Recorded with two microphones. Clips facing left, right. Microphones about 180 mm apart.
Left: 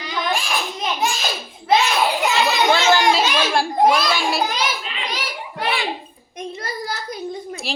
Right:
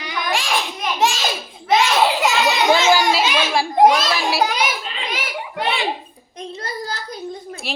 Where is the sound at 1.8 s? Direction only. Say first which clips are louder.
Right 3 dB; 90° right.